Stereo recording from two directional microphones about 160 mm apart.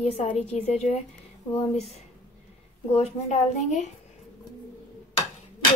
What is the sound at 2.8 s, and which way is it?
Speech, 45° left (ahead or behind).